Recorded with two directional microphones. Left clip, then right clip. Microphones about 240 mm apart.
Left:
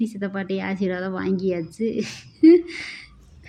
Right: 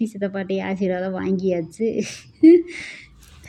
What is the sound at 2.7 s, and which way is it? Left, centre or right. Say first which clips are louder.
Speech: even; left.